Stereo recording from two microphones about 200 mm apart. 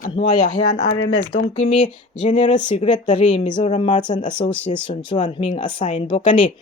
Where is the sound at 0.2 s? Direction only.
25° left (ahead or behind).